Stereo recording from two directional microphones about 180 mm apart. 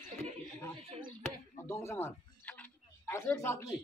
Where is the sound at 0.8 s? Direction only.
30° right (ahead or behind).